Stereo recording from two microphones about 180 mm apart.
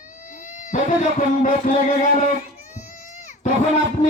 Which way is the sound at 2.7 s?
45° left (ahead or behind).